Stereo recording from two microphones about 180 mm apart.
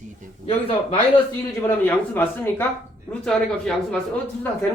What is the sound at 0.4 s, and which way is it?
Speech, 30° left (ahead or behind).